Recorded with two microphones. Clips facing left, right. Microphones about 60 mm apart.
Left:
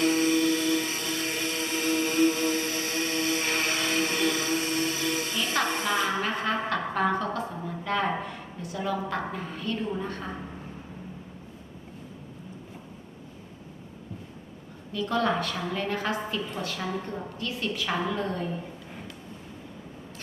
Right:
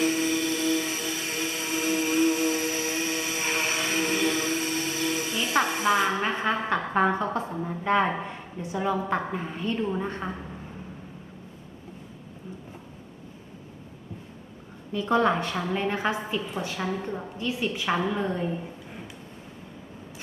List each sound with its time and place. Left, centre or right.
0.0 s music: centre
6.1 s a sound: right
9.9 s a woman's voice: right
14.9 s a woman's voice: right